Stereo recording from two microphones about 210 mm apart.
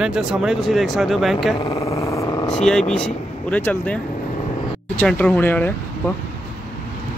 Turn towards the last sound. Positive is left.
turn(degrees=10)  # may be behind; listen again after turning